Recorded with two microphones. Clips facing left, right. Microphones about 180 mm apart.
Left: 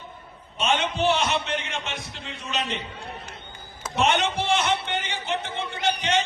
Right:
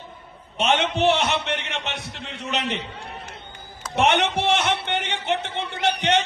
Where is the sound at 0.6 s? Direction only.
65° right (ahead or behind).